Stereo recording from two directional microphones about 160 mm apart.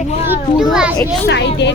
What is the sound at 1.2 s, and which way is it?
Speech, 90° left.